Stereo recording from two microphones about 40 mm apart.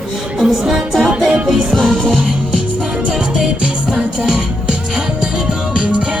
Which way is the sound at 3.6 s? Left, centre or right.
Right.